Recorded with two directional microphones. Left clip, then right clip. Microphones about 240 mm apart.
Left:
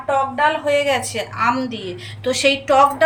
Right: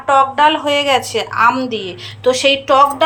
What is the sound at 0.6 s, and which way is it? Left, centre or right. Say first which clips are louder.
A woman's voice: right 3 dB; centre.